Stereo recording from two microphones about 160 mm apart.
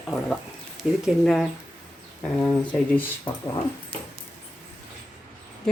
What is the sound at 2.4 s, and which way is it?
Speech, 10° left (ahead or behind).